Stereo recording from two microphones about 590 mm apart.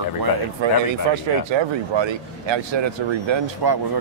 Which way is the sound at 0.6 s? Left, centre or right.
Right.